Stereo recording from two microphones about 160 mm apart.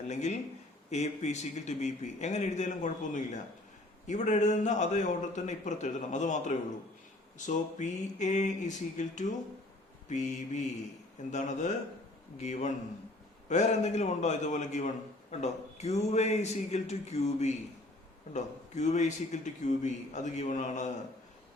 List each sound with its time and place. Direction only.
0.1 s a man's voice: 45° left (ahead or behind)